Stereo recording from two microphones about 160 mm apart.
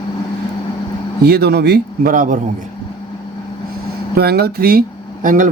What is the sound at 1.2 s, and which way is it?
A man's voice, 80° right.